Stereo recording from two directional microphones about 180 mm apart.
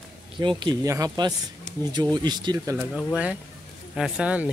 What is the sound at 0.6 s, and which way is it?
Speech, 20° right (ahead or behind).